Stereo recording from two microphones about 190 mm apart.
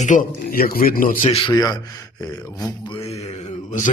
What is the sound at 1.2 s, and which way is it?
Speech, 25° left (ahead or behind).